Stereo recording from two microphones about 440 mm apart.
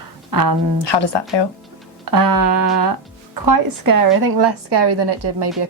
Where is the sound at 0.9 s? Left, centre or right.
Left.